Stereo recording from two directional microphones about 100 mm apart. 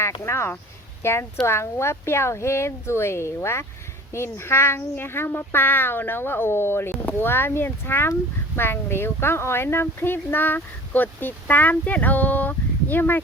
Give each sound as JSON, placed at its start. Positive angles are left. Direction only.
{"t": 0.3, "sound": "speech", "side_deg": 25}